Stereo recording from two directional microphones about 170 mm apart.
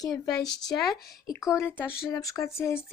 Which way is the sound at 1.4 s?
15° left (ahead or behind).